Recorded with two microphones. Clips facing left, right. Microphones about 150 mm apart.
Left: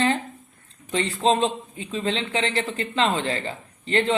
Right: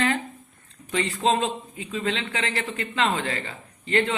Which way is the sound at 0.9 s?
30° left (ahead or behind).